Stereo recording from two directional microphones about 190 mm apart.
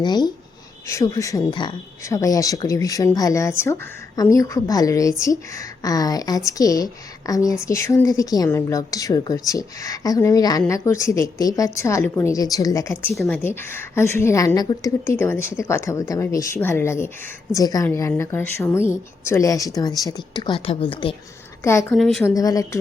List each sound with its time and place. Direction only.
0.0 s speech: 20° left (ahead or behind)
13.1 s speech: centre (ahead or behind)
13.4 s speech: 10° left (ahead or behind)
21.6 s speech: 15° left (ahead or behind)
21.9 s speech: centre (ahead or behind)
22.2 s speech: 20° left (ahead or behind)